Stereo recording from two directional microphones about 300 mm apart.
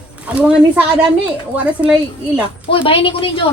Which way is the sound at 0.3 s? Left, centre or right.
Centre.